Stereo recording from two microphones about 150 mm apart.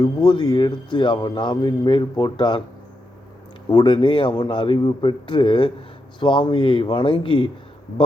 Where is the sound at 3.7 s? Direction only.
30° left (ahead or behind).